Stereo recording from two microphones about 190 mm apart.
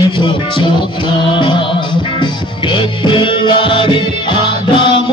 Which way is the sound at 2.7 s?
25° left (ahead or behind).